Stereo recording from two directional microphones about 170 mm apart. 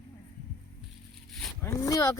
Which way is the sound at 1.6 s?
20° left (ahead or behind).